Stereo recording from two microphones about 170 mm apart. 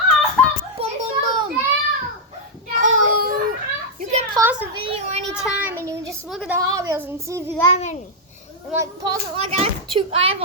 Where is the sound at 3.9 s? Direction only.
45° right (ahead or behind).